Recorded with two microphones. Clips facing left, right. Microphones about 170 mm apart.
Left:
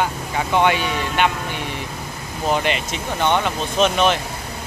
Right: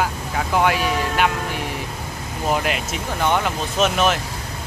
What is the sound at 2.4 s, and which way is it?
Speech, 5° right (ahead or behind).